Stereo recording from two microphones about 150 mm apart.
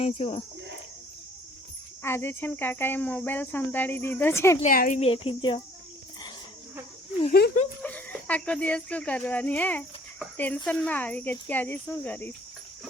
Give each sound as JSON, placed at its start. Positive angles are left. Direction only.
{"t": 0.0, "sound": "speech", "side_deg": 40}
{"t": 2.0, "sound": "speech", "side_deg": 15}
{"t": 4.6, "sound": "speech", "side_deg": 65}
{"t": 4.9, "sound": "speech", "side_deg": 40}
{"t": 7.3, "sound": "speech", "side_deg": 90}
{"t": 7.8, "sound": "speech", "side_deg": 10}